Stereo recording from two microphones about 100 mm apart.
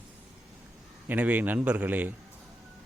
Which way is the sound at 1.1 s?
15° right (ahead or behind).